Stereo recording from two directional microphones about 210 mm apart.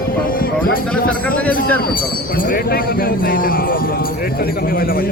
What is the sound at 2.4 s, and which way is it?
A man's voice, 45° left (ahead or behind).